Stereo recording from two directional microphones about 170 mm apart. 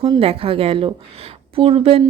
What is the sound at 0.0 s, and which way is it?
A woman's voice, 35° right (ahead or behind).